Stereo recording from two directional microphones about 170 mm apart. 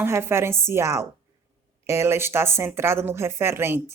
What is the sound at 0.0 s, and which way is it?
Speech, 15° right (ahead or behind).